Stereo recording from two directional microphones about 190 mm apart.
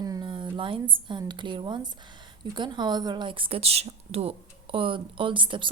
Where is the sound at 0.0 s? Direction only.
20° right (ahead or behind).